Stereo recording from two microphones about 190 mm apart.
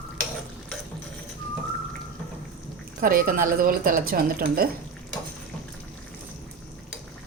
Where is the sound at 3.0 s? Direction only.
50° right (ahead or behind).